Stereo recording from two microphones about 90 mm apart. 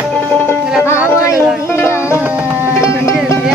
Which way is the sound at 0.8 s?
30° left (ahead or behind).